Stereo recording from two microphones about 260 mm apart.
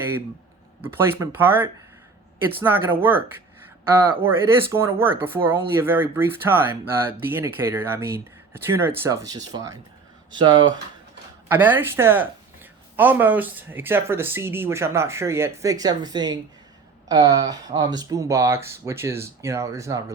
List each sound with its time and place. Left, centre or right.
0.8 s speech: centre